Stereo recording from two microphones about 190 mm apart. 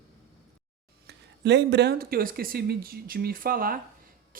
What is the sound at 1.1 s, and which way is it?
Speech, 65° right (ahead or behind).